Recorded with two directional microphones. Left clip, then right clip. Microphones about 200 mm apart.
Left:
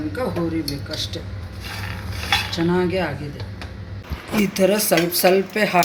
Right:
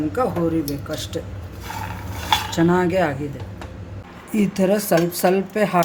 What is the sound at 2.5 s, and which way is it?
Cutlery, 60° right (ahead or behind).